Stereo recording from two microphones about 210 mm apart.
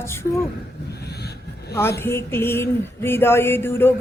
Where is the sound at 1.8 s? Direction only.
10° left (ahead or behind).